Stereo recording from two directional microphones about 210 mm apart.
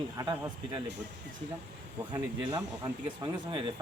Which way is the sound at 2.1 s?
20° right (ahead or behind).